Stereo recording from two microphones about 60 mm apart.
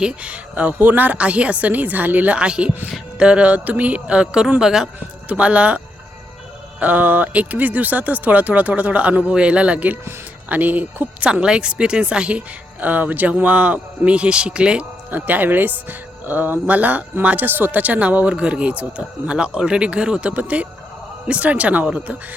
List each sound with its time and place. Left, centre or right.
0.0 s speech: right
4.9 s speech: right
11.3 s a woman's voice: centre
12.8 s speech: right
15.1 s speech: right